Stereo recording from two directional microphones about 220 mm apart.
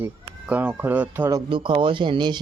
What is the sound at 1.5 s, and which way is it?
Speech, 20° right (ahead or behind).